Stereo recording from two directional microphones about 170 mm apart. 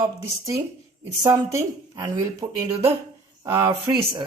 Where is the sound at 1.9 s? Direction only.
15° right (ahead or behind).